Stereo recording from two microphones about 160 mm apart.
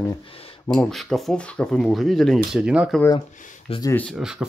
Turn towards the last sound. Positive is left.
turn(degrees=-5)  # may be behind; listen again after turning